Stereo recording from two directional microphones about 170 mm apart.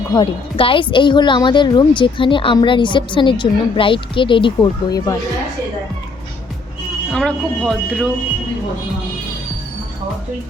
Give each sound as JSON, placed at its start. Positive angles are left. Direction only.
{"t": 0.1, "sound": "a woman's voice", "side_deg": 30}
{"t": 7.1, "sound": "speech", "side_deg": 5}